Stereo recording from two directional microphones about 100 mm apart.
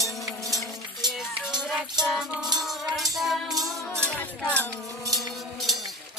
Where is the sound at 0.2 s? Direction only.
Centre (ahead or behind).